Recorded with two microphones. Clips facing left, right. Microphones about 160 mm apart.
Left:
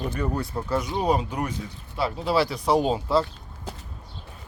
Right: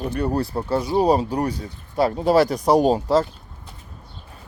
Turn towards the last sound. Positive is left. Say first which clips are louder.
# right 5 dB
turn(degrees=-40)  # may be behind; listen again after turning